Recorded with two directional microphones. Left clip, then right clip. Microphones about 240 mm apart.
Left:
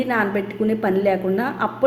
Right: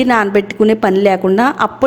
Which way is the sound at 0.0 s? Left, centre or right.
Right.